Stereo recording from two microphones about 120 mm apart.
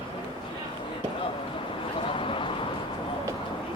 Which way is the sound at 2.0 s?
45° left (ahead or behind).